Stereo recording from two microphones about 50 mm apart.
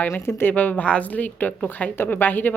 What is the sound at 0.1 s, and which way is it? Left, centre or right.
Speech, left.